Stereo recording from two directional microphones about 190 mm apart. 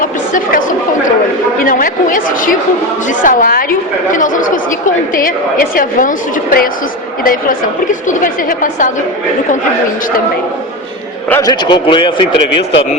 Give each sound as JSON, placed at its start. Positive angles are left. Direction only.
{"t": 0.0, "sound": "chatter", "side_deg": 45}
{"t": 1.6, "sound": "chatter", "side_deg": 45}
{"t": 3.1, "sound": "a woman's voice", "side_deg": 45}
{"t": 11.3, "sound": "a man's voice", "side_deg": 15}